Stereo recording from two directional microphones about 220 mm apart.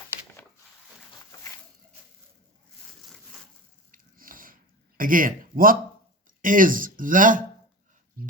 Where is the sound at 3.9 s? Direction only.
40° right (ahead or behind).